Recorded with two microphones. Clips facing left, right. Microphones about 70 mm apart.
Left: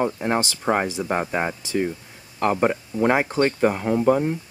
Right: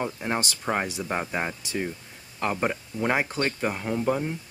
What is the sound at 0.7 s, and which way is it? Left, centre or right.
Speech, left.